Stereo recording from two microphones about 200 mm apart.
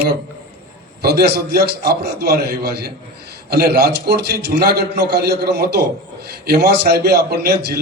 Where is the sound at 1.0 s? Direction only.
55° right (ahead or behind).